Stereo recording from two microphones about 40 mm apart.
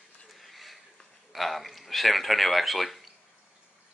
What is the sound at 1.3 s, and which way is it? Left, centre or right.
Speech, centre.